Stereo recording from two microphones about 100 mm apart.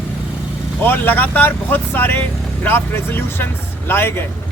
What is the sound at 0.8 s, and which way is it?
Speech, 20° left (ahead or behind).